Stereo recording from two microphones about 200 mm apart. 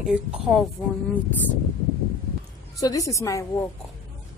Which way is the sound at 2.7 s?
15° left (ahead or behind).